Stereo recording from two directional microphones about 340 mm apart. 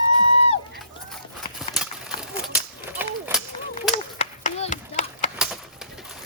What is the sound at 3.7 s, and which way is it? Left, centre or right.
Chop, centre.